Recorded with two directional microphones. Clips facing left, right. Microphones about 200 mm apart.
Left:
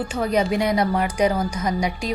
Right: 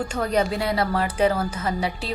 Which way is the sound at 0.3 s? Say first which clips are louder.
Left 3 dB; 15° left (ahead or behind).